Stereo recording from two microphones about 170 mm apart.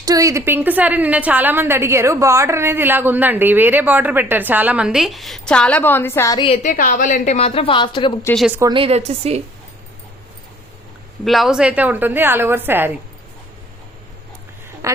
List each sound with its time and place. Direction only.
0.0 s a woman's voice: 20° right (ahead or behind); by 6.4 s 15° left (ahead or behind)
6.4 s a woman's voice: 35° left (ahead or behind)
6.7 s a woman's voice: 50° left (ahead or behind)
7.3 s a woman's voice: 35° left (ahead or behind)
8.4 s a woman's voice: 5° right (ahead or behind)
8.6 s a woman's voice: 30° right (ahead or behind)
11.3 s a woman's voice: centre (ahead or behind)
14.8 s speech: 15° right (ahead or behind)